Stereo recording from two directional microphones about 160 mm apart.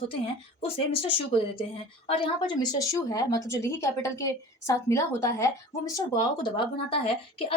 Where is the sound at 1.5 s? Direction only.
35° left (ahead or behind); by 5.5 s 20° left (ahead or behind).